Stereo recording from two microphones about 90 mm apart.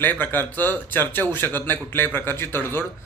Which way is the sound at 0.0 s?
20° left (ahead or behind).